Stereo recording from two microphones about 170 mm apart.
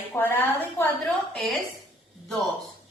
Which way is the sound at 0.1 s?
10° left (ahead or behind).